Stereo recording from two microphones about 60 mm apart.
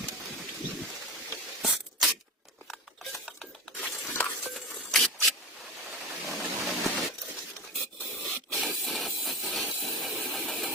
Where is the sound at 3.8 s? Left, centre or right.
Left.